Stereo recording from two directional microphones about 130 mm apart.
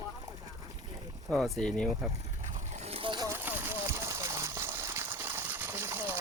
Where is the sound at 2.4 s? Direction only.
60° right (ahead or behind).